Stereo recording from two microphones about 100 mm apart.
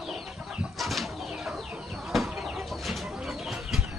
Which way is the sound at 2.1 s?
Centre (ahead or behind).